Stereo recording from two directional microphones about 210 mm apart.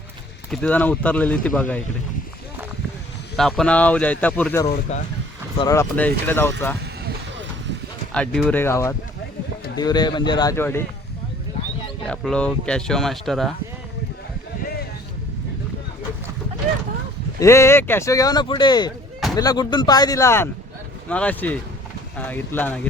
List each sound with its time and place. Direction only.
0.5 s speech: 5° left (ahead or behind)
3.3 s speech: centre (ahead or behind)
4.9 s speech: 30° left (ahead or behind)
5.5 s speech: 15° left (ahead or behind)
6.7 s vehicle: 55° right (ahead or behind)
8.1 s speech: 5° left (ahead or behind)
12.0 s speech: 5° left (ahead or behind)
17.4 s speech: 15° left (ahead or behind)